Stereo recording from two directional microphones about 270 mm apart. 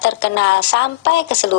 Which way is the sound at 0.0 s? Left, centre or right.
Left.